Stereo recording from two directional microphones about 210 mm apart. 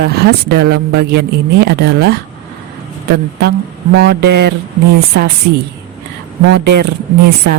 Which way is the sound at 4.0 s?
50° right (ahead or behind).